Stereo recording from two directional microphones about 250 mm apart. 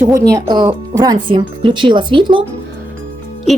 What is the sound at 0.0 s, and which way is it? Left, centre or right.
Speech, centre.